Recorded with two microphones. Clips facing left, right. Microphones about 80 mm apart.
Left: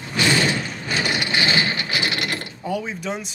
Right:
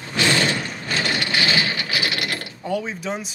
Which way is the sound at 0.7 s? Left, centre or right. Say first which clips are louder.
Even; centre.